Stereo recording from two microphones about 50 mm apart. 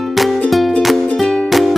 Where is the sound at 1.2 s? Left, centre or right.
Centre.